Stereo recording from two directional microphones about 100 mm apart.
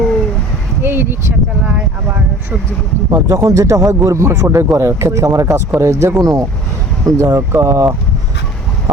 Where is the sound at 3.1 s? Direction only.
35° right (ahead or behind).